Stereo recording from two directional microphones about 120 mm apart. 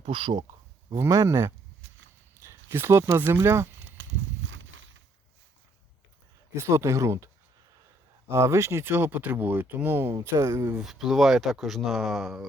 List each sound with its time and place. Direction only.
0.0 s speech: 50° right (ahead or behind)
0.9 s speech: 25° right (ahead or behind)
6.5 s speech: 25° right (ahead or behind)
8.3 s speech: 25° right (ahead or behind)
10.8 s speech: centre (ahead or behind)